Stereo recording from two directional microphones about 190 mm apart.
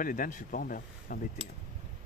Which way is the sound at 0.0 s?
45° left (ahead or behind).